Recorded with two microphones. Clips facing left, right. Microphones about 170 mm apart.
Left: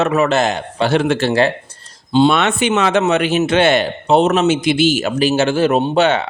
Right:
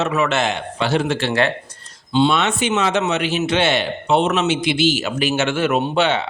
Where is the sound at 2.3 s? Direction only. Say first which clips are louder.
Left 3 dB; 60° left (ahead or behind).